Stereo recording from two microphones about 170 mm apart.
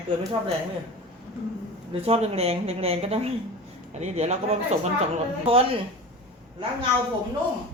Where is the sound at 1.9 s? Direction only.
35° right (ahead or behind).